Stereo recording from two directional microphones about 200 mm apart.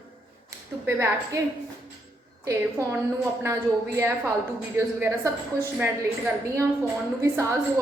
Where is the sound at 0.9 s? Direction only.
15° right (ahead or behind).